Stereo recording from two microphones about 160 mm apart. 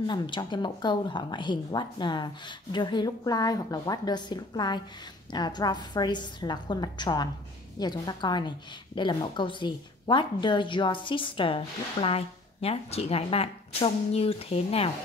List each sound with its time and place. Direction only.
0.0 s a woman's voice: 30° left (ahead or behind)